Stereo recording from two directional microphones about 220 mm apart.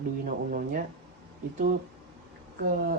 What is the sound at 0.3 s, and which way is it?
Speech, 40° right (ahead or behind).